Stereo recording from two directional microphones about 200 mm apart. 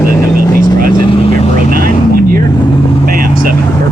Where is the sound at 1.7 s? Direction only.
45° right (ahead or behind).